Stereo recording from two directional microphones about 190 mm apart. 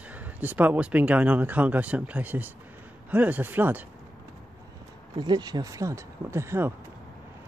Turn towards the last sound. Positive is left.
turn(degrees=-15)  # may be behind; listen again after turning